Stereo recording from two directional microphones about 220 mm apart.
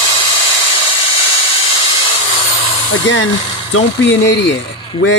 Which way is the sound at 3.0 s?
60° left (ahead or behind).